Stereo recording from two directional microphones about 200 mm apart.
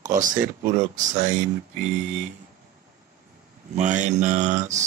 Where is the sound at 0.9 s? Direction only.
40° right (ahead or behind).